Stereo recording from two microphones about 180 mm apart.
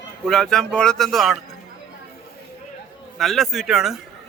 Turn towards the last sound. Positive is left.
turn(degrees=0)  # may be behind; listen again after turning